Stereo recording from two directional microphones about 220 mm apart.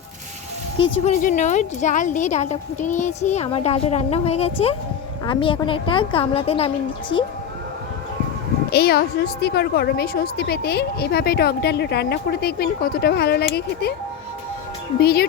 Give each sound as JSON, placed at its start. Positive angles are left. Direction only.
{"t": 1.0, "sound": "a woman's voice", "side_deg": 35}
{"t": 8.7, "sound": "a woman's voice", "side_deg": 45}
{"t": 14.9, "sound": "a woman's voice", "side_deg": 45}